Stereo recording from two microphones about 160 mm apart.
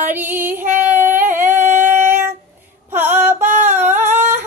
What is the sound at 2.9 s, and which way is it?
Female singing, 15° right (ahead or behind).